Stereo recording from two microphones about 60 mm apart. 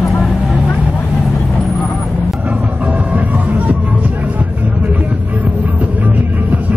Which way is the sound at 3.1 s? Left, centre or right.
Right.